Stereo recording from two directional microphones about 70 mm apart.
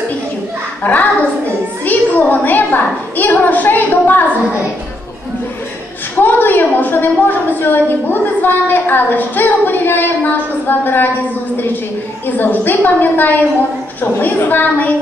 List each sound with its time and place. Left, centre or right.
0.8 s a woman's voice: centre
6.2 s a woman's voice: left
12.4 s a woman's voice: left